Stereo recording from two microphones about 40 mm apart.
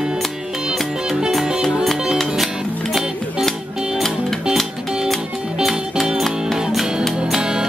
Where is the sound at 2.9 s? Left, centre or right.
Centre.